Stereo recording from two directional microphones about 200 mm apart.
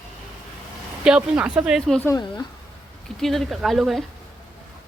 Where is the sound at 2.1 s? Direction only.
20° left (ahead or behind).